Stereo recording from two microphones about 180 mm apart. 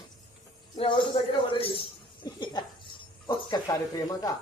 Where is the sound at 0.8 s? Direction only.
30° left (ahead or behind).